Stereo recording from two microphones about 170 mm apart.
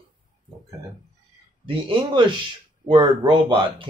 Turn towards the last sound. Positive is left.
turn(degrees=-30)  # may be behind; listen again after turning